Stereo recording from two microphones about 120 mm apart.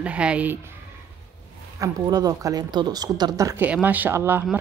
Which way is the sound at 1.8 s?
35° right (ahead or behind).